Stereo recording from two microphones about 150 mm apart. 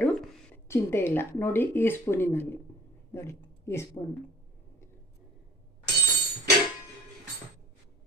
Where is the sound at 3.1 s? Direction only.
15° left (ahead or behind).